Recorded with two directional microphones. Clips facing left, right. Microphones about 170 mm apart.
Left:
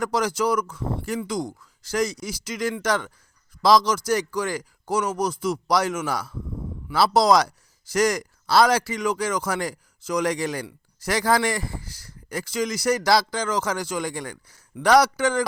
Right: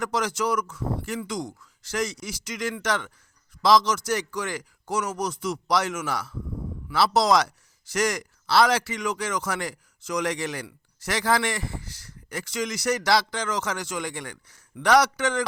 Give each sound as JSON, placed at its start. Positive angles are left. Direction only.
{"t": 0.0, "sound": "speech", "side_deg": 35}